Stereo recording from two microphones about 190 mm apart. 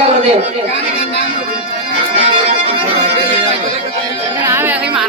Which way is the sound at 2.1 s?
35° right (ahead or behind).